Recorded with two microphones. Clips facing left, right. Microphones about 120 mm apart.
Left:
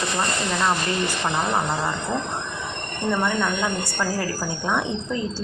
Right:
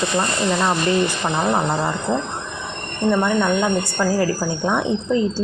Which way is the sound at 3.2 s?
20° right (ahead or behind).